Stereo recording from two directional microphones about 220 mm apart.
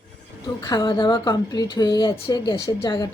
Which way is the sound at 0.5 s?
20° left (ahead or behind).